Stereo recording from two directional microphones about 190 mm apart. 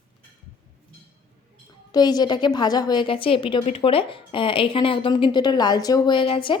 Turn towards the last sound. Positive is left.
turn(degrees=25)  # may be behind; listen again after turning